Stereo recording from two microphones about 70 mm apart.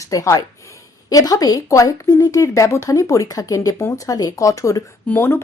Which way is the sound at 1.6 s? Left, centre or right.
Left.